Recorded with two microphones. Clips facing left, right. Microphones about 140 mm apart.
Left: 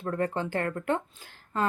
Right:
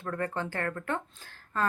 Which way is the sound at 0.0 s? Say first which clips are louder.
Left 4 dB; 20° left (ahead or behind).